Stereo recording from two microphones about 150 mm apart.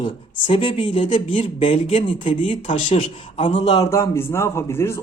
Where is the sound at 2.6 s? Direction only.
55° left (ahead or behind).